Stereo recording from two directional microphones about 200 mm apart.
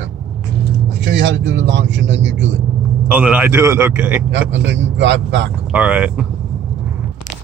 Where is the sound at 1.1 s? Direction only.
65° right (ahead or behind).